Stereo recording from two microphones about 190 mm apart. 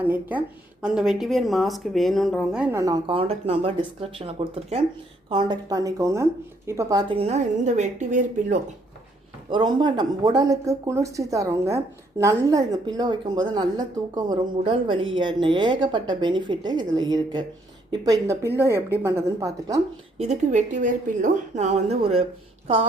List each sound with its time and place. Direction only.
0.0 s a woman's voice: 10° right (ahead or behind)
2.7 s a woman's voice: 20° right (ahead or behind)
7.1 s a woman's voice: 30° right (ahead or behind)
9.5 s a woman's voice: 25° right (ahead or behind)
20.1 s a woman's voice: 35° right (ahead or behind)